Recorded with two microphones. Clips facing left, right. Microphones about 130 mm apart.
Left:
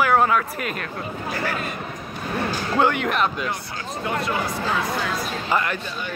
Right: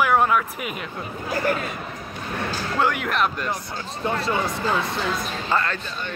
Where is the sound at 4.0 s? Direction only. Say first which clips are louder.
Right 1 dB; 30° right (ahead or behind).